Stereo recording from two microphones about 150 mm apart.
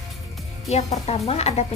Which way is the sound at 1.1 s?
45° left (ahead or behind).